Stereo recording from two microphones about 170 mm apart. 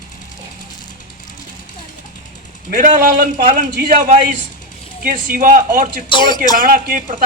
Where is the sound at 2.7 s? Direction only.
50° right (ahead or behind).